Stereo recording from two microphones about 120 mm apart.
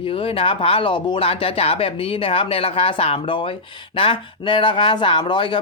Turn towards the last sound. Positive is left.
turn(degrees=45)  # may be behind; listen again after turning